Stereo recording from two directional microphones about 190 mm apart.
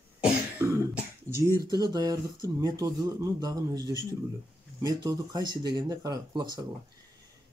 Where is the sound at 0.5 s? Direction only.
15° right (ahead or behind).